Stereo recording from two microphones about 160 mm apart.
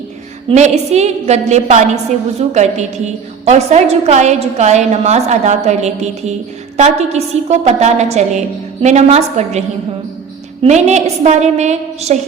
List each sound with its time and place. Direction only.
0.4 s a woman's voice: 45° right (ahead or behind)